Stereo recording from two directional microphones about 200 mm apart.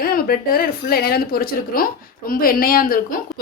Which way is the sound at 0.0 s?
45° left (ahead or behind).